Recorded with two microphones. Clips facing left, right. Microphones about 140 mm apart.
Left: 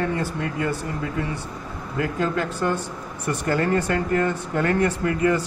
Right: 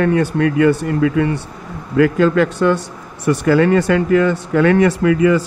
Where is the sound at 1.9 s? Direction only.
85° right.